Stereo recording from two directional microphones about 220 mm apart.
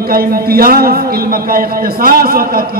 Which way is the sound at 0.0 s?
40° right (ahead or behind).